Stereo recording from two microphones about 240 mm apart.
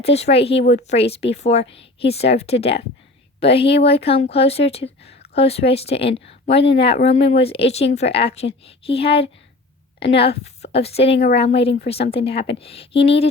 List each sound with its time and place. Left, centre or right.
0.0 s speech: left